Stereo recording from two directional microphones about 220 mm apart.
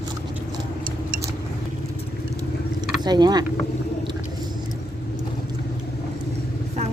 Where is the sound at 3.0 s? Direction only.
20° right (ahead or behind).